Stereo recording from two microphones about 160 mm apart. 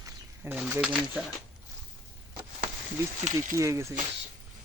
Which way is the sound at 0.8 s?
5° right (ahead or behind).